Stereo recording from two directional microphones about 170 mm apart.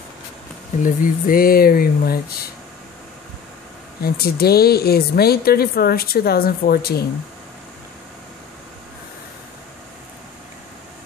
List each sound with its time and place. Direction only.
0.8 s speech: 55° left (ahead or behind)
4.0 s speech: 65° left (ahead or behind)